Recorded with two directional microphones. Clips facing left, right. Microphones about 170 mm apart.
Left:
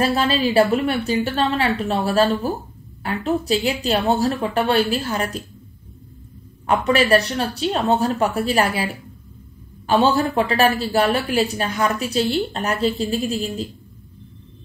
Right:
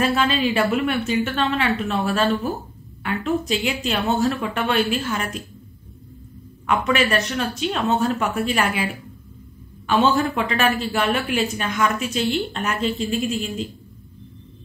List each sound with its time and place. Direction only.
0.0 s a woman's voice: 35° left (ahead or behind)
6.6 s a woman's voice: 35° left (ahead or behind)